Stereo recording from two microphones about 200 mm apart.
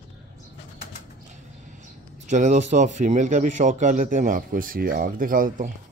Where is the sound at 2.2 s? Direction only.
35° right (ahead or behind).